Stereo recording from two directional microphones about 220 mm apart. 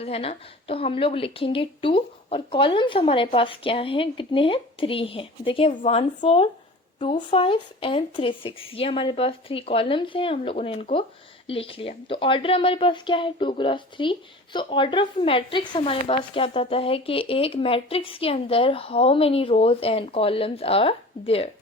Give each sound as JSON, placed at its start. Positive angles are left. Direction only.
{"t": 0.0, "sound": "a woman's voice", "side_deg": 25}